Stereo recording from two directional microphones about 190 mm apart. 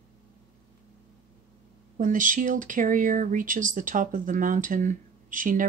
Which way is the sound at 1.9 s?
45° right (ahead or behind).